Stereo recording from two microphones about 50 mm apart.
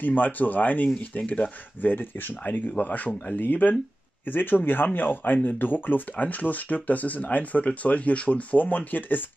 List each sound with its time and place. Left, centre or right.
0.0 s speech: left